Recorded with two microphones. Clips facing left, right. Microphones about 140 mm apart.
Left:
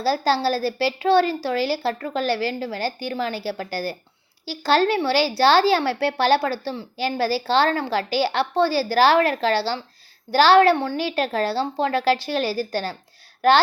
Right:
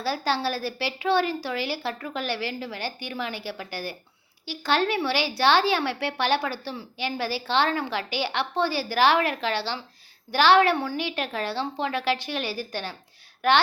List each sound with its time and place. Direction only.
0.0 s a woman's voice: 35° left (ahead or behind)